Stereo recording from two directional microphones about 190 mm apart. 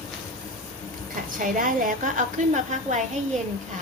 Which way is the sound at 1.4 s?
45° right (ahead or behind).